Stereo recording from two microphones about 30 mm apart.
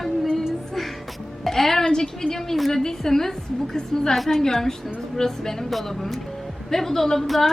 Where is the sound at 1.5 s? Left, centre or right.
Centre.